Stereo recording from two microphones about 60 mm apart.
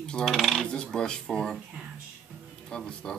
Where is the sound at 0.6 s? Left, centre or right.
Centre.